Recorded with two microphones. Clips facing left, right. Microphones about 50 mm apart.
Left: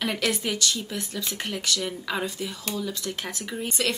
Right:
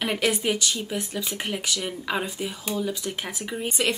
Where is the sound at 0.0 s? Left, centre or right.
Centre.